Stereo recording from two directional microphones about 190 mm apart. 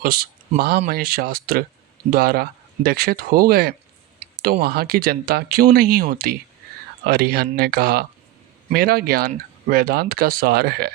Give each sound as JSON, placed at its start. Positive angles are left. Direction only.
{"t": 0.0, "sound": "speech", "side_deg": -50}
{"t": 4.2, "sound": "clicking", "side_deg": -35}
{"t": 4.6, "sound": "speech", "side_deg": -55}